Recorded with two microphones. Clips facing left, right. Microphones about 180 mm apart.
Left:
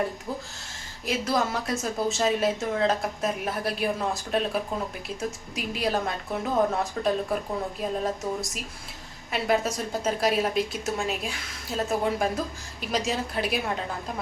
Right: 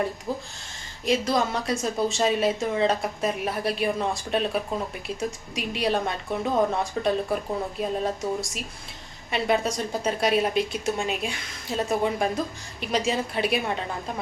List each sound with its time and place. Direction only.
0.3 s speech: 25° right (ahead or behind)
1.0 s a woman's voice: 5° left (ahead or behind)
7.0 s a woman's voice: 10° right (ahead or behind)